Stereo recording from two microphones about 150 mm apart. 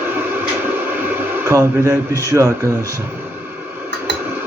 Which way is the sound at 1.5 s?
20° right (ahead or behind).